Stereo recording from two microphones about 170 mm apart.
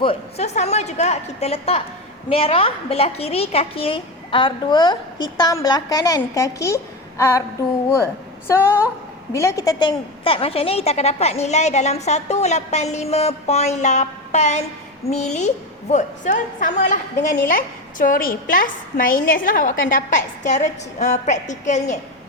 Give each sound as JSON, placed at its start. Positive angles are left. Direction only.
{"t": 0.0, "sound": "a woman's voice", "side_deg": 35}
{"t": 8.4, "sound": "a woman's voice", "side_deg": 15}